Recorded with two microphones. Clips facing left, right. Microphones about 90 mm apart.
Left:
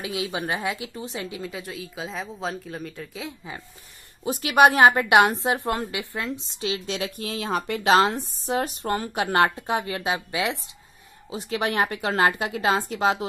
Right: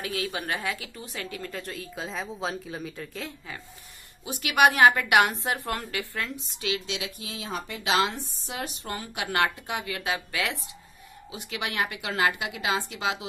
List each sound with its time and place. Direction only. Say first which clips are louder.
0.0 s a woman's voice: left 3 dB; 20° left (ahead or behind)
1.5 s speech: left 1 dB; 5° left (ahead or behind)
3.3 s a woman's voice: left 3 dB; 20° left (ahead or behind)
4.2 s a woman's voice: left 4 dB; 35° left (ahead or behind)
7.0 s speech: left 7 dB; 55° left (ahead or behind)
7.8 s a woman's voice: left 6 dB; 45° left (ahead or behind); by 10.6 s 20° left (ahead or behind)
11.2 s a woman's voice: left 7 dB; 35° left (ahead or behind)